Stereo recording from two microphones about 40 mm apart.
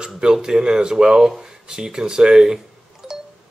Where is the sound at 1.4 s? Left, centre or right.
Centre.